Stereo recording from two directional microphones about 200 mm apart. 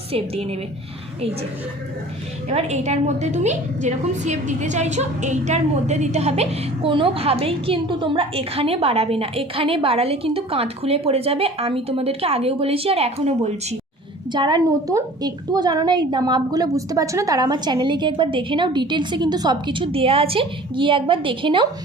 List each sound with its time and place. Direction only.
0.1 s a woman's voice: 30° right (ahead or behind)
2.5 s a woman's voice: 35° right (ahead or behind)
14.3 s a woman's voice: 20° right (ahead or behind)